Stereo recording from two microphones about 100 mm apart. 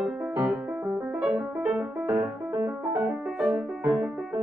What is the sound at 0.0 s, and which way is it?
Music, 5° right (ahead or behind).